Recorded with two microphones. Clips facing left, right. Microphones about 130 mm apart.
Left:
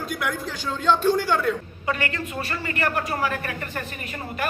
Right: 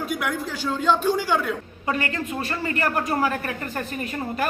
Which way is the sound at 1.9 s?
35° right (ahead or behind).